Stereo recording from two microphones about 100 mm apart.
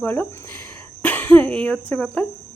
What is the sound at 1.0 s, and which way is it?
Cough, 20° left (ahead or behind).